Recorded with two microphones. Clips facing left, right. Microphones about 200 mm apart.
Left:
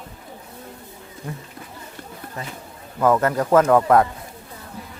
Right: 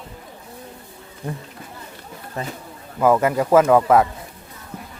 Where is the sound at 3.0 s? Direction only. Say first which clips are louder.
Right 1 dB; 10° right (ahead or behind).